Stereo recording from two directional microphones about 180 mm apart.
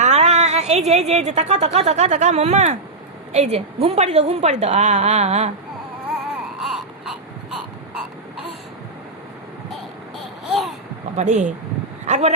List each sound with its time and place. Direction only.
0.0 s a woman's voice: 40° right (ahead or behind)
6.1 s baby cry: centre (ahead or behind)
10.4 s babbling: centre (ahead or behind)
11.2 s a woman's voice: 40° right (ahead or behind)